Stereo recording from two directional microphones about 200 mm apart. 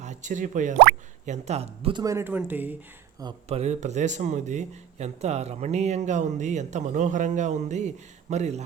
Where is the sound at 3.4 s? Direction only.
30° right (ahead or behind).